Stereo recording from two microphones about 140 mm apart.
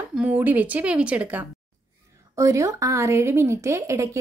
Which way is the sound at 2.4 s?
20° right (ahead or behind).